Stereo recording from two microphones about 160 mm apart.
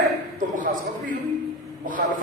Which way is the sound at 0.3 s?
55° right (ahead or behind).